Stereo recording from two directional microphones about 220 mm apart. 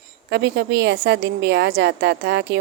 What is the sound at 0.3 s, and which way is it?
Speech, 50° right (ahead or behind).